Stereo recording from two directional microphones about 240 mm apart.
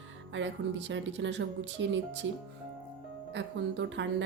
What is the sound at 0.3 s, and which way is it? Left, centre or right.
A woman's voice, right.